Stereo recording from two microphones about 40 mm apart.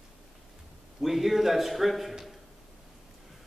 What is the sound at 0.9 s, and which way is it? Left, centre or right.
A man's voice, centre.